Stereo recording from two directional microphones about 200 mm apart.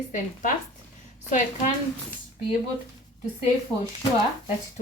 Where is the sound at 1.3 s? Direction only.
40° left (ahead or behind).